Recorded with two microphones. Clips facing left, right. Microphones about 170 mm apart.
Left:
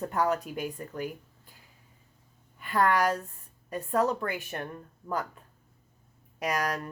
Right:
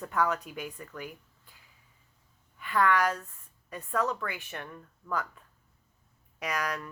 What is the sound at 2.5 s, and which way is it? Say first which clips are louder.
A woman's voice: left 1 dB; 40° left (ahead or behind).